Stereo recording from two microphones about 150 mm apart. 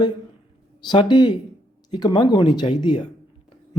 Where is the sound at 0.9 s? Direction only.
30° left (ahead or behind).